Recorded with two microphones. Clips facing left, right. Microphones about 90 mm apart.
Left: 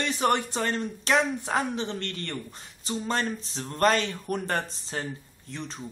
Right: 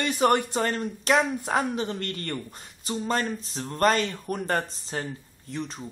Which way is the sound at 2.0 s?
45° right (ahead or behind).